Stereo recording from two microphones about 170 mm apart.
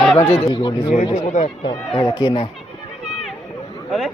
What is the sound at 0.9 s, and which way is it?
Speech, 45° left (ahead or behind).